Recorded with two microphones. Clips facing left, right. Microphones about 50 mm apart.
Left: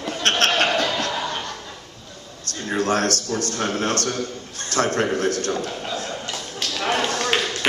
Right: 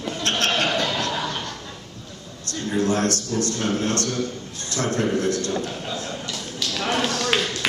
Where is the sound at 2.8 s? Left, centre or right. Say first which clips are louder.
Left 1 dB; left.